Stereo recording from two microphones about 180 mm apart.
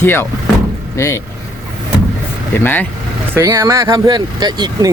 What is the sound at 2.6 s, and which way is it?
Speech, 10° left (ahead or behind).